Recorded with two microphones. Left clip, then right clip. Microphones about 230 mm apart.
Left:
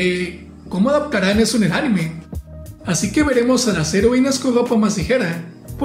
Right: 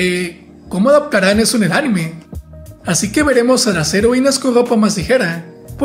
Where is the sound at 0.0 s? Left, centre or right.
Right.